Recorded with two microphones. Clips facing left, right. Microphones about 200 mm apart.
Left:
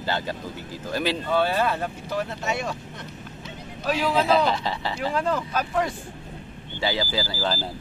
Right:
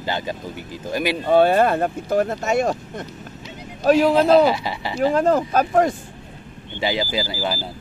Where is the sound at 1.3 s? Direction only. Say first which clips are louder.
Right 9 dB; 50° right (ahead or behind).